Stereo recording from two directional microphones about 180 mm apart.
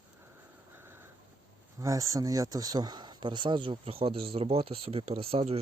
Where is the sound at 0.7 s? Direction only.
10° right (ahead or behind).